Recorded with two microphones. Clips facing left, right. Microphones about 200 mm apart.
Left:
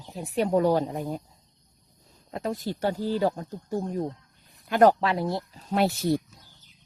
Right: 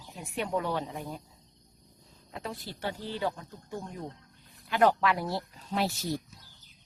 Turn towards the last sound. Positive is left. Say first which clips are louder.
# left 7 dB
turn(degrees=60)  # may be behind; listen again after turning